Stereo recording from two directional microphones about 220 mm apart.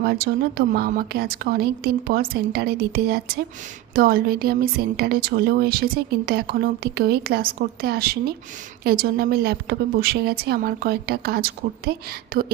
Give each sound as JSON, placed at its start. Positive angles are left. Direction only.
{"t": 0.0, "sound": "a woman's voice", "side_deg": -45}